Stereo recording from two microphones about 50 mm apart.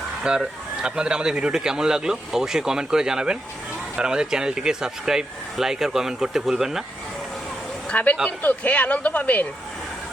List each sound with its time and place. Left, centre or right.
0.3 s speech: centre
7.9 s speech: left